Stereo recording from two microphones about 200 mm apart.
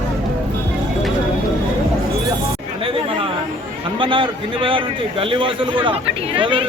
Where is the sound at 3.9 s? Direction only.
25° right (ahead or behind).